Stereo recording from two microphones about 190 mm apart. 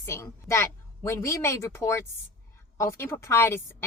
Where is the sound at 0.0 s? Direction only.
15° left (ahead or behind).